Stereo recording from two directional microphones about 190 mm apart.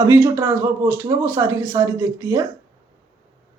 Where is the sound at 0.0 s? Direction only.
15° right (ahead or behind).